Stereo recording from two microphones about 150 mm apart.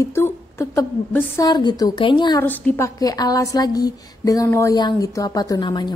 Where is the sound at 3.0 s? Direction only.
25° left (ahead or behind).